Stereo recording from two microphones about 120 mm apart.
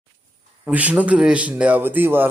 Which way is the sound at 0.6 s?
15° right (ahead or behind).